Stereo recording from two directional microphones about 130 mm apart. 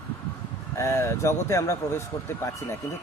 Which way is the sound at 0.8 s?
20° left (ahead or behind).